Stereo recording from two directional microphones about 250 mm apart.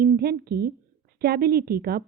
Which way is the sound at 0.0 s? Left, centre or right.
Right.